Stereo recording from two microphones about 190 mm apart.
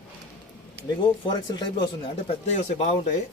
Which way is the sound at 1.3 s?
25° left (ahead or behind).